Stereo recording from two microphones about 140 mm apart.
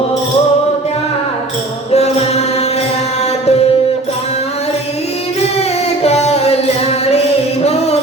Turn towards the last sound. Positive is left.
turn(degrees=50)  # may be behind; listen again after turning